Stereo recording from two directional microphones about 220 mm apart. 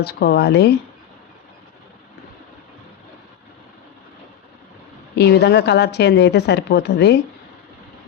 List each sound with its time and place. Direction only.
0.0 s a woman's voice: 45° left (ahead or behind)
5.1 s a woman's voice: 50° left (ahead or behind)